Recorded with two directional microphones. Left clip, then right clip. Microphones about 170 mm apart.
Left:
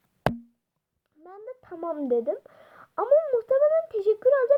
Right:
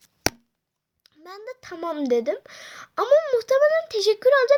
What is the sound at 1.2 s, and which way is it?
A child's voice, 50° right (ahead or behind).